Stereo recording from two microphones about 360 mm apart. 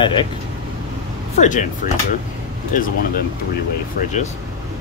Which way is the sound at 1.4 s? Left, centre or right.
Left.